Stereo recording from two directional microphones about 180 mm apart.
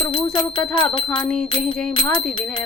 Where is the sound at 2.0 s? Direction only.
5° left (ahead or behind).